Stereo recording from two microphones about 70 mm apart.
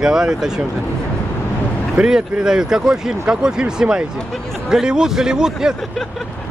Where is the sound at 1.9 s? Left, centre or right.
Centre.